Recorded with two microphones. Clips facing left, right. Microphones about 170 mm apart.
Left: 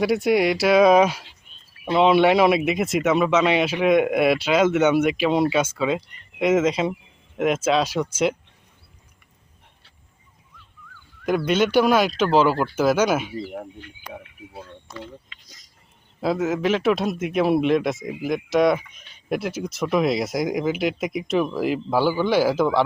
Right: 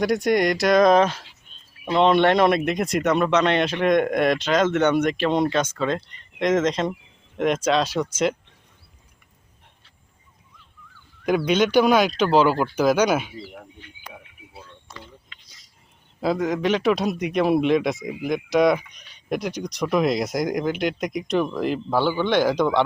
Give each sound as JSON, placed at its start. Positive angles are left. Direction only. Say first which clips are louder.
{"t": 0.0, "sound": "speech", "louder": "left 1 dB", "side_deg": 5}
{"t": 11.3, "sound": "speech", "louder": "even", "side_deg": 0}
{"t": 16.2, "sound": "speech", "louder": "even", "side_deg": 5}